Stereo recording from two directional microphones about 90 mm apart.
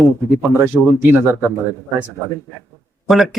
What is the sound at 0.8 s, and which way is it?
Speech, 5° left (ahead or behind).